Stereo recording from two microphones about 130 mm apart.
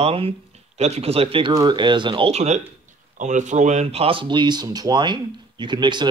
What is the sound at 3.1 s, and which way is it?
Speech, 70° right (ahead or behind).